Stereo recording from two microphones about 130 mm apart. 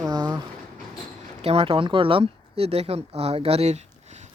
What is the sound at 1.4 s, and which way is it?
Speech, 50° right (ahead or behind).